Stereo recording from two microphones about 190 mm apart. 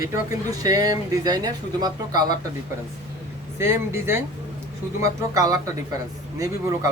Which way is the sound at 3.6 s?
15° right (ahead or behind).